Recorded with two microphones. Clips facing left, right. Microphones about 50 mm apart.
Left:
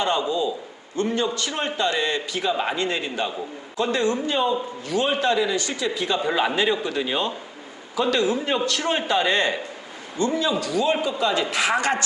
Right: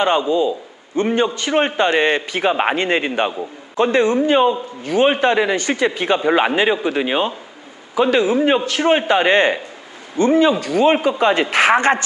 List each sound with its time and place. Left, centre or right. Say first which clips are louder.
0.0 s a man's voice: right 6 dB; right
2.7 s a man's voice: right 7 dB; right